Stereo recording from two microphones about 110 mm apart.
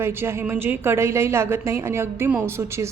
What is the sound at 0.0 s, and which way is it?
A woman's voice, 20° right (ahead or behind).